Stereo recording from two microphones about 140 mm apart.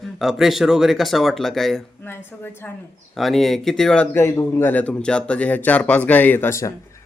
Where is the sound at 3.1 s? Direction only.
Centre (ahead or behind).